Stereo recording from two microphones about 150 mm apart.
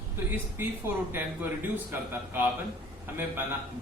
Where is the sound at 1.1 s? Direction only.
15° right (ahead or behind).